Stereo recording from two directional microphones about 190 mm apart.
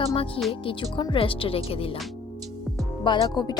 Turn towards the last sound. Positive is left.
turn(degrees=20)  # may be behind; listen again after turning